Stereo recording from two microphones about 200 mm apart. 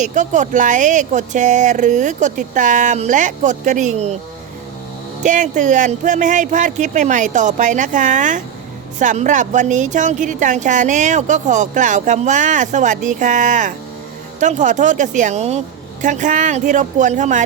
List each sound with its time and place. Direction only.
0.0 s speech: 40° right (ahead or behind)
5.2 s speech: 40° right (ahead or behind)